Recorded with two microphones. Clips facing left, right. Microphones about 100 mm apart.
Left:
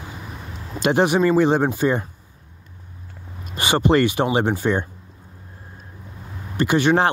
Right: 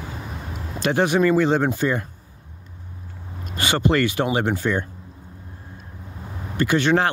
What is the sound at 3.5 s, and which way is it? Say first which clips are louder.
Speech: left 3 dB; 20° left (ahead or behind).